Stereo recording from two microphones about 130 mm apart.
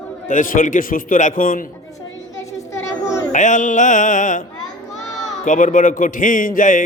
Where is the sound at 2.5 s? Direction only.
20° left (ahead or behind).